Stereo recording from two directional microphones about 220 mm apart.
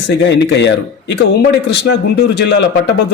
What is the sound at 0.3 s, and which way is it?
Speech, 55° left (ahead or behind).